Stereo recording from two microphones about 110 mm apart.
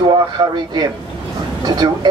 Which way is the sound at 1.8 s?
40° right (ahead or behind).